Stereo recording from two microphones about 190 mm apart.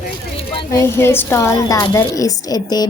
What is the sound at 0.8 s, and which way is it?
A woman's voice, 15° left (ahead or behind).